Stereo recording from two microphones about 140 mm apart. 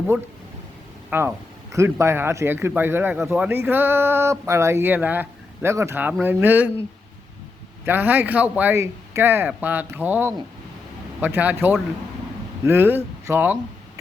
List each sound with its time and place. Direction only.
1.1 s speech: 15° right (ahead or behind)
7.9 s speech: 15° right (ahead or behind)